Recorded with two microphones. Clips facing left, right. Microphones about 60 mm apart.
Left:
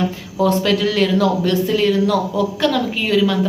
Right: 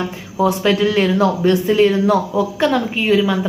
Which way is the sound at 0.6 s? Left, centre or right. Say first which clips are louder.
Right 2 dB; right.